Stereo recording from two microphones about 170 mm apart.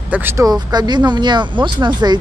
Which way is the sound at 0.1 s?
15° right (ahead or behind).